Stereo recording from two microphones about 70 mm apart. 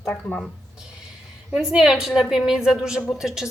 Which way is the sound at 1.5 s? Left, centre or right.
Centre.